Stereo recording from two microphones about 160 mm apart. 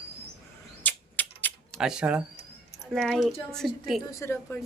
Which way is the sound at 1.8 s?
5° right (ahead or behind).